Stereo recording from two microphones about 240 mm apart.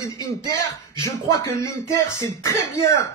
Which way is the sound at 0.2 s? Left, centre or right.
Centre.